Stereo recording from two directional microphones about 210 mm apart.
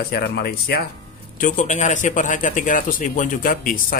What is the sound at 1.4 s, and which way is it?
Speech, 40° left (ahead or behind).